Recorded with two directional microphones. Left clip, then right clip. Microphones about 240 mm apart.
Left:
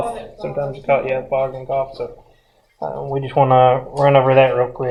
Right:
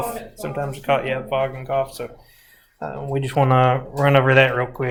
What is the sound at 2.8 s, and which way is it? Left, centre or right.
Speech, right.